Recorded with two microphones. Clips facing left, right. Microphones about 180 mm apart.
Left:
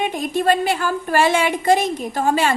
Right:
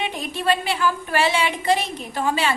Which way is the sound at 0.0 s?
45° left (ahead or behind).